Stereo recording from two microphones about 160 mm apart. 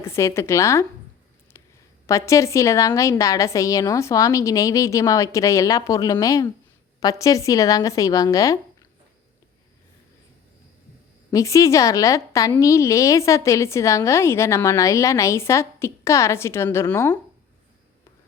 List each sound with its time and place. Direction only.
0.0 s a woman's voice: 15° left (ahead or behind)
1.5 s a sound: 15° left (ahead or behind)
2.0 s a woman's voice: 20° left (ahead or behind)
11.3 s a woman's voice: 20° left (ahead or behind)